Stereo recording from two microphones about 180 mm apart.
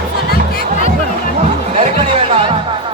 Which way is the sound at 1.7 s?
35° right (ahead or behind).